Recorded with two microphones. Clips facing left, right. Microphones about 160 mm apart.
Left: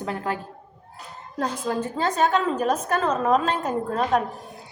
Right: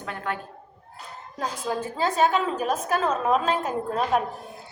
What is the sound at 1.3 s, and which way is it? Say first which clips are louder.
A woman's voice: left 3 dB; 5° right (ahead or behind).